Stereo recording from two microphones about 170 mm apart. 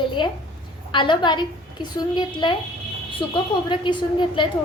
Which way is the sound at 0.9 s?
30° left (ahead or behind).